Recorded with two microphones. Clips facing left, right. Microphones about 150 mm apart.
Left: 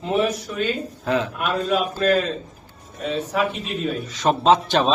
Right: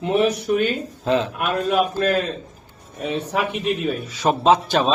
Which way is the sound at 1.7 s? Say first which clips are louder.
Even; 60° right (ahead or behind).